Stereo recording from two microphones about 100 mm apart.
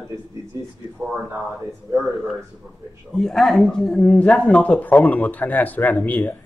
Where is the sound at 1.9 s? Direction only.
Centre (ahead or behind); by 6.3 s 15° left (ahead or behind).